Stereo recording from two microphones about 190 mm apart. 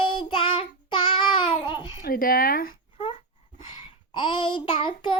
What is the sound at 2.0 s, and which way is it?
Speech, 50° left (ahead or behind).